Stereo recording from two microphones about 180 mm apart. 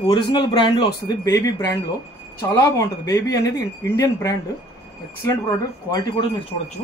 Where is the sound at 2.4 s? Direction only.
15° left (ahead or behind).